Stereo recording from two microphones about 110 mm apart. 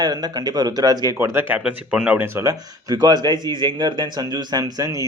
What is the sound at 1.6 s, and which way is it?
Speech, 10° right (ahead or behind).